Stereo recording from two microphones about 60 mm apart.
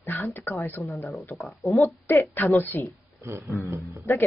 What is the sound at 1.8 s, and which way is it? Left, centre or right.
Speech, left.